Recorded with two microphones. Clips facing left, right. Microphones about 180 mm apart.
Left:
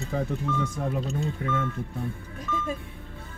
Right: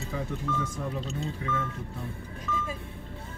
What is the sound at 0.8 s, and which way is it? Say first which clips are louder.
Speech: left 4 dB; 55° left (ahead or behind).